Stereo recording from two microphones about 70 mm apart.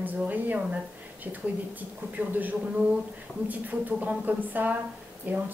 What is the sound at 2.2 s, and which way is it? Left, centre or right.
Speech, right.